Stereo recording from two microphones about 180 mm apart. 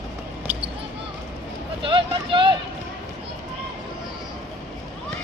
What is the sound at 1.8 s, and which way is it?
Vehicle, 30° right (ahead or behind).